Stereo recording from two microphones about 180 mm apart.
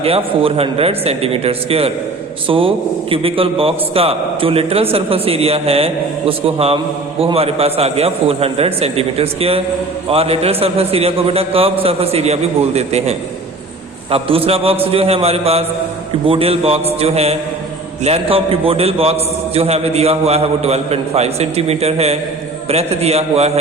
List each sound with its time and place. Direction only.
0.0 s a man's voice: 30° right (ahead or behind)